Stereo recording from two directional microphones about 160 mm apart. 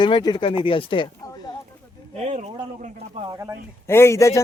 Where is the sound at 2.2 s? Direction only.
45° right (ahead or behind).